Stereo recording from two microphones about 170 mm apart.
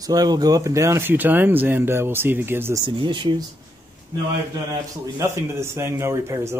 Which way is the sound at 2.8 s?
30° right (ahead or behind).